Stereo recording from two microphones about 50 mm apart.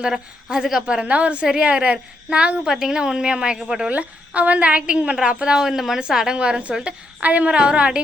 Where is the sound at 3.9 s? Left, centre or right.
Right.